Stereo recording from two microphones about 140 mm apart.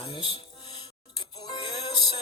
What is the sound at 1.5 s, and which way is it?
Music, 30° left (ahead or behind).